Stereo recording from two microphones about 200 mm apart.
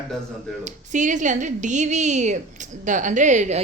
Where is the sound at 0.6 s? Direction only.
40° right (ahead or behind).